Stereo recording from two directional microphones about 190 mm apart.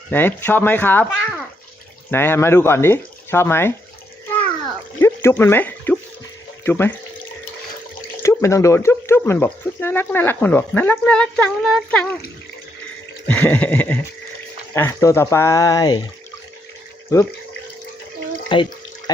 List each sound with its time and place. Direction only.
0.1 s speech: 10° left (ahead or behind)
4.9 s speech: 15° left (ahead or behind)
8.2 s speech: 15° left (ahead or behind)
13.2 s speech: 10° left (ahead or behind)
18.4 s water: 25° left (ahead or behind)